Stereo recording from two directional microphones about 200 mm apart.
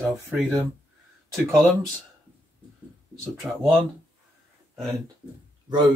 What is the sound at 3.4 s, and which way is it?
Speech, 10° right (ahead or behind).